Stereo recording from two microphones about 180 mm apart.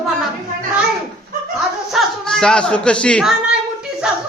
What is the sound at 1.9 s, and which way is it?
Speech, centre (ahead or behind).